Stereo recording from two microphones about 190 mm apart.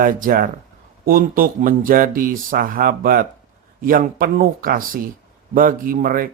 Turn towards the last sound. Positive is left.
turn(degrees=-50)  # may be behind; listen again after turning